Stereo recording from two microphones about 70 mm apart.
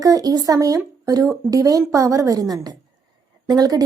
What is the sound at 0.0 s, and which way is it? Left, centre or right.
A woman's voice, right.